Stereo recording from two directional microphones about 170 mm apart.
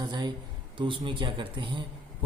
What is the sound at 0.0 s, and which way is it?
Speech, 25° right (ahead or behind).